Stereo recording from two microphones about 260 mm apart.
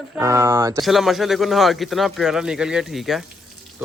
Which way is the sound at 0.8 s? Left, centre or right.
Centre.